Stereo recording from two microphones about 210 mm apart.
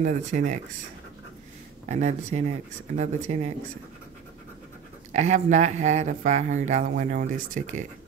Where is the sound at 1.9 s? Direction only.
35° right (ahead or behind).